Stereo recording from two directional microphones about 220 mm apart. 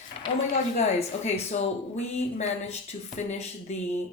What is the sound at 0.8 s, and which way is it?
A woman's voice, 30° left (ahead or behind).